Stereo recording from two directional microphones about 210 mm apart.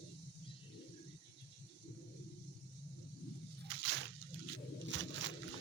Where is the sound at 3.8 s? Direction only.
55° right (ahead or behind).